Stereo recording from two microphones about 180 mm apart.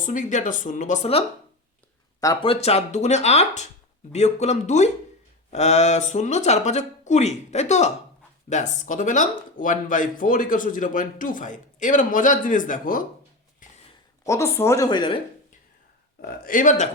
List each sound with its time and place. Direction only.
0.0 s speech: 45° left (ahead or behind)
2.2 s speech: 25° left (ahead or behind); by 13.0 s 50° left (ahead or behind)
13.6 s a sound: 45° left (ahead or behind)
14.3 s a woman's voice: 15° left (ahead or behind)
16.2 s speech: 50° left (ahead or behind)